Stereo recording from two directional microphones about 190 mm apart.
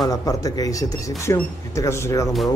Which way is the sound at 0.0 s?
20° left (ahead or behind).